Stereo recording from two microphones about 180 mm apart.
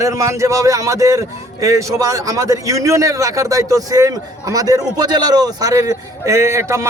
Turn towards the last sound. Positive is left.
turn(degrees=-15)  # may be behind; listen again after turning